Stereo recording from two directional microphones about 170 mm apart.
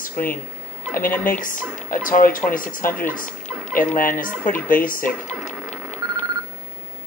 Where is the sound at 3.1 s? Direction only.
55° left (ahead or behind).